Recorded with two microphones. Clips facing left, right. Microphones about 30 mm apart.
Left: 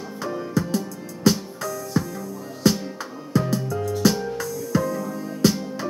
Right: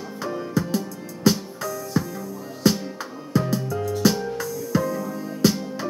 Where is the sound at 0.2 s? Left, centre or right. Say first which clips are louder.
Even; centre.